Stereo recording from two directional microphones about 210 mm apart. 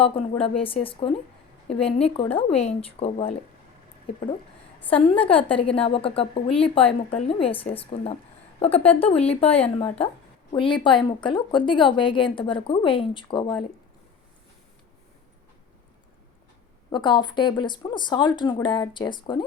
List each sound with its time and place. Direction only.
0.0 s a woman's voice: 25° left (ahead or behind)
5.2 s a woman's voice: 25° left (ahead or behind)
16.9 s a woman's voice: 20° left (ahead or behind)